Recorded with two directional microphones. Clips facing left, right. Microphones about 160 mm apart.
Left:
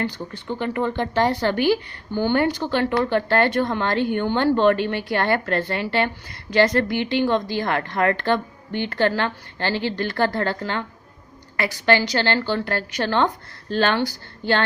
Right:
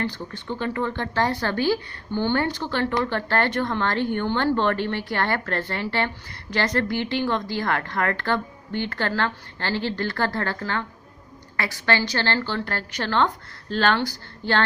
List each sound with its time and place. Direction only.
0.0 s a woman's voice: 15° left (ahead or behind)